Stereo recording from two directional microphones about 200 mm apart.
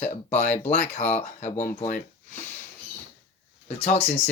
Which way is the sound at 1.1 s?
35° left (ahead or behind).